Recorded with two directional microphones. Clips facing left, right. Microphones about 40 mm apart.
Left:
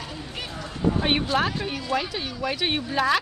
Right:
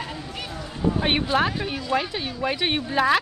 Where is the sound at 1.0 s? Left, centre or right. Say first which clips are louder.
Right 2 dB; centre.